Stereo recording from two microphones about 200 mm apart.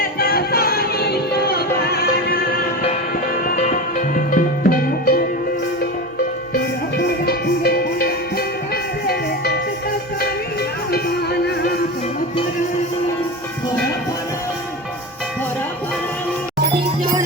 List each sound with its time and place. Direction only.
0.0 s music: 50° left (ahead or behind)
6.5 s music: 55° left (ahead or behind)
10.9 s music: 50° left (ahead or behind)